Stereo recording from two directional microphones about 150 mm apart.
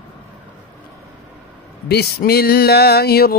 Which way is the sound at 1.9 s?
90° left.